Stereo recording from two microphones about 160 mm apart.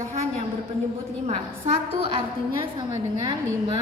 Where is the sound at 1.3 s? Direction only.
40° right (ahead or behind).